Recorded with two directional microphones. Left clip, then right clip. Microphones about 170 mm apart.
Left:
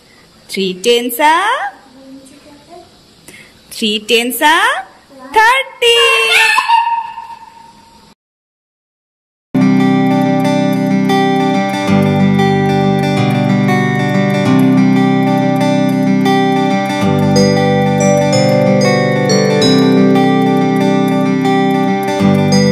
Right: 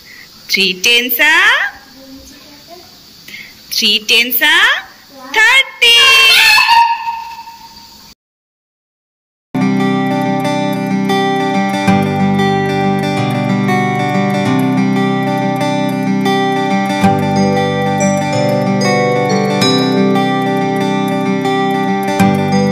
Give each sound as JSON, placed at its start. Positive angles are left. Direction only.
{"t": 0.5, "sound": "a woman's voice", "side_deg": 30}
{"t": 3.3, "sound": "a sound", "side_deg": 40}
{"t": 4.3, "sound": "speech", "side_deg": 35}
{"t": 9.5, "sound": "music", "side_deg": 0}